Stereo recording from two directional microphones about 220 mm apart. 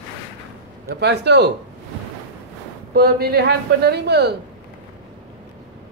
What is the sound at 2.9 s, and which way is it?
Speech, 45° right (ahead or behind).